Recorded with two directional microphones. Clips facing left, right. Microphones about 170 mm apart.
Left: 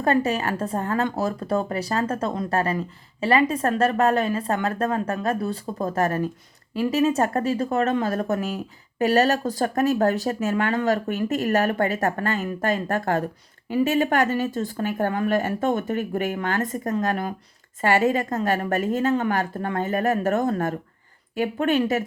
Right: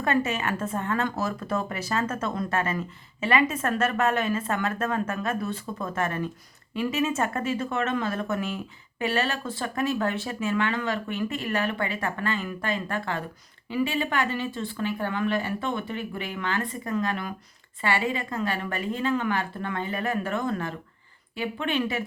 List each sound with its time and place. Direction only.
0.0 s speech: 35° left (ahead or behind)